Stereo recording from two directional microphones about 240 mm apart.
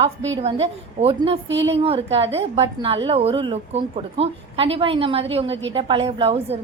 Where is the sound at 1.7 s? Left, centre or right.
Right.